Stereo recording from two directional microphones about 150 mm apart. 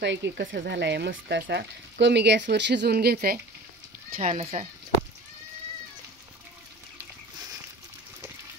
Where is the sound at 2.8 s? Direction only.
90° right.